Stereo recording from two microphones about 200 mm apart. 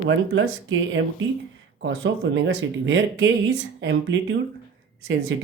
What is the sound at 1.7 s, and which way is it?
Speech, 65° right (ahead or behind).